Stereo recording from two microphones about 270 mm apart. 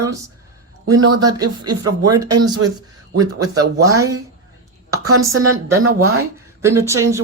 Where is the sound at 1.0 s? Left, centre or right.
Right.